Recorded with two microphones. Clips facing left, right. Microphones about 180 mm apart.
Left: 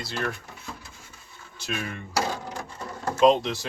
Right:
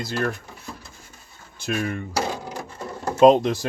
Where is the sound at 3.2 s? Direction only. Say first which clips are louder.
Right 5 dB; 45° right (ahead or behind).